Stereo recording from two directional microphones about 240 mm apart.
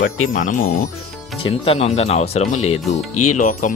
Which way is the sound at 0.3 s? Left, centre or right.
Left.